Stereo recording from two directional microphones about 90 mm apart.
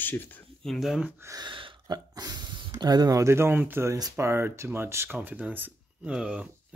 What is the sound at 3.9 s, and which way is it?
Speech, 45° right (ahead or behind).